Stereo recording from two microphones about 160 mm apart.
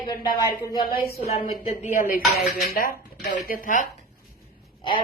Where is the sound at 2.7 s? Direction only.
65° left (ahead or behind).